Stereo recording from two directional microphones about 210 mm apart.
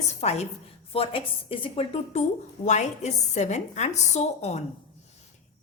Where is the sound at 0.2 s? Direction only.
30° left (ahead or behind).